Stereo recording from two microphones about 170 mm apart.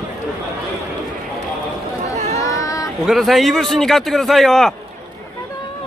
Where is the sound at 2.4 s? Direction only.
20° left (ahead or behind).